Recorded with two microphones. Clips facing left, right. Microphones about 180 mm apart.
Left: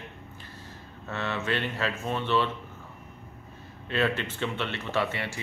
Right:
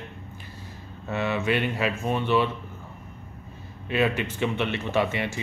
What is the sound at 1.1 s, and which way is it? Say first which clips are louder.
Speech: right 5 dB; 15° right (ahead or behind).